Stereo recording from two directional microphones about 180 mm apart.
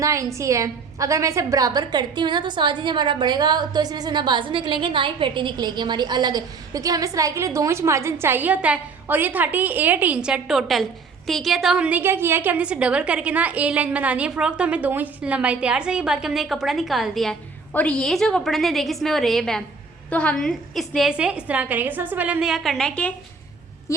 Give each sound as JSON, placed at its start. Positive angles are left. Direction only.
{"t": 0.0, "sound": "a woman's voice", "side_deg": -15}